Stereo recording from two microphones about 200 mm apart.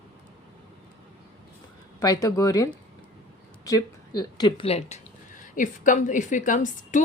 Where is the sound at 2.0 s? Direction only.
20° left (ahead or behind).